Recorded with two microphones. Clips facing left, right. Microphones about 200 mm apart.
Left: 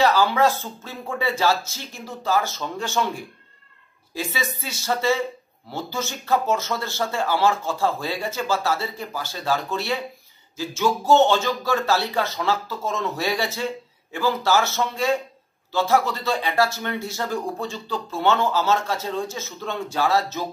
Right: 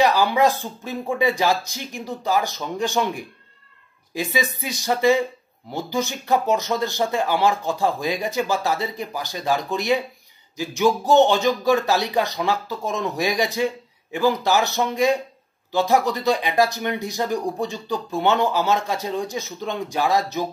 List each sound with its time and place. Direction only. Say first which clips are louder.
0.0 s speech: right 1 dB; 15° right (ahead or behind)